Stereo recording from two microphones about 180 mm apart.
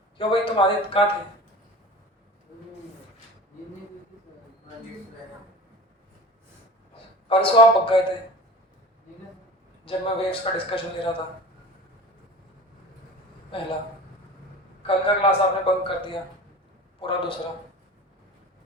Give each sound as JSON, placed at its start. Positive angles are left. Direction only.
{"t": 0.2, "sound": "a man's voice", "side_deg": 30}
{"t": 6.9, "sound": "a man's voice", "side_deg": 30}
{"t": 9.8, "sound": "a man's voice", "side_deg": 30}
{"t": 13.5, "sound": "a man's voice", "side_deg": 30}
{"t": 14.8, "sound": "a man's voice", "side_deg": 30}